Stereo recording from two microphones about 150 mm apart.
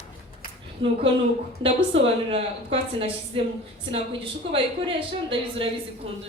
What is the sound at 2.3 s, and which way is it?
A woman's voice, 40° right (ahead or behind).